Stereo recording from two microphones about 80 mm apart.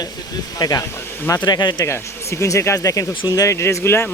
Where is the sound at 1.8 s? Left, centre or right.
Left.